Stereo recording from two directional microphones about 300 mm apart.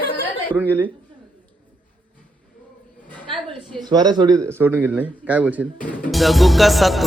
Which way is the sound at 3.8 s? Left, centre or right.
Centre.